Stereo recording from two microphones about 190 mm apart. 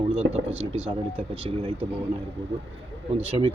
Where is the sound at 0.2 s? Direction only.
90° right.